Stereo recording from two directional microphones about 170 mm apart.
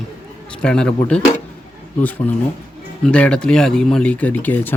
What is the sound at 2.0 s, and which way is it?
Speech, 10° left (ahead or behind).